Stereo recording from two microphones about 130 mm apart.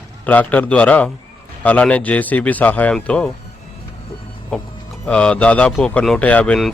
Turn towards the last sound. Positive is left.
turn(degrees=10)  # may be behind; listen again after turning